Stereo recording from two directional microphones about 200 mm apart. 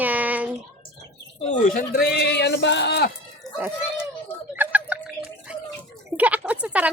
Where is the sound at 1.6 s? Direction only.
45° left (ahead or behind).